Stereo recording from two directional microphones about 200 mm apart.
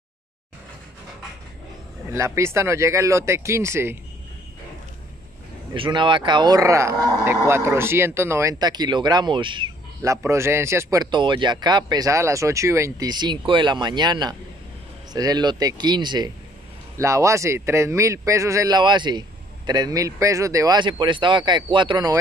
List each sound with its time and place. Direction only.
2.0 s speech: 15° right (ahead or behind)
5.7 s speech: 25° right (ahead or behind)